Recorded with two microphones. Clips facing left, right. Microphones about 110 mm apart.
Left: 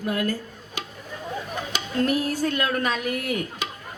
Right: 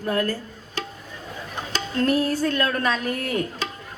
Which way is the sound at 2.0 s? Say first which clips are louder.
Right 2 dB; 40° right (ahead or behind).